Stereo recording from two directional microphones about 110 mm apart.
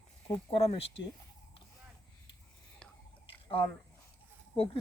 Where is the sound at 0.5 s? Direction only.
55° left (ahead or behind).